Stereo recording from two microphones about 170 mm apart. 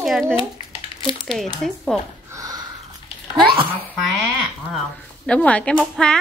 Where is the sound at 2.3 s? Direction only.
20° right (ahead or behind).